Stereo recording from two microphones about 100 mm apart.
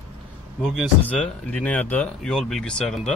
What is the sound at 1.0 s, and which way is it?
Speech, 15° left (ahead or behind).